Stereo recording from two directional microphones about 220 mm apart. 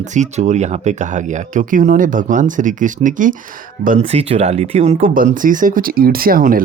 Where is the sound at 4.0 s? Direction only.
25° right (ahead or behind).